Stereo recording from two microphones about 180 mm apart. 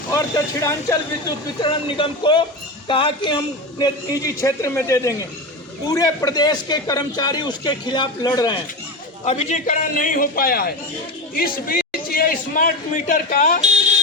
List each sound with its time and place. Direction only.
0.1 s a man's voice: 15° left (ahead or behind)
9.2 s a man's voice: 35° left (ahead or behind)